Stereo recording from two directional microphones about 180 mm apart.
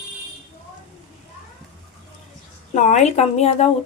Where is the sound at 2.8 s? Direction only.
40° left (ahead or behind).